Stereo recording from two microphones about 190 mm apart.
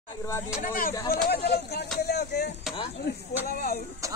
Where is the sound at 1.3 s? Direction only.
60° left (ahead or behind).